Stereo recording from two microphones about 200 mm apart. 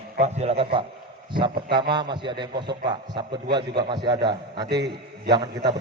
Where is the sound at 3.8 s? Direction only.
20° right (ahead or behind).